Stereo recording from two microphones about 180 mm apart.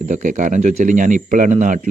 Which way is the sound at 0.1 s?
45° right (ahead or behind).